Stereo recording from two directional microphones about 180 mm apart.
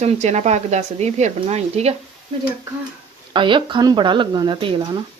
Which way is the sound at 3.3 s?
25° right (ahead or behind).